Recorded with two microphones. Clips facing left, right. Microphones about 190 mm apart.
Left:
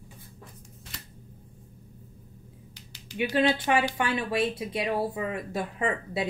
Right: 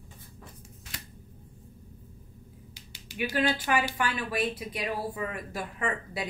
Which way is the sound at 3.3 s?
25° left (ahead or behind).